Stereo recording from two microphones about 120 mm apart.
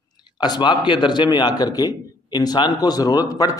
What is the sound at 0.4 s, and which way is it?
A man's voice, 40° left (ahead or behind).